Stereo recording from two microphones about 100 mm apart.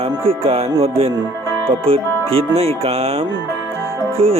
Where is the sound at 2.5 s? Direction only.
90° right.